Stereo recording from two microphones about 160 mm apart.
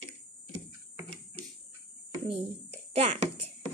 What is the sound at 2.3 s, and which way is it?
A child's voice, 40° right (ahead or behind).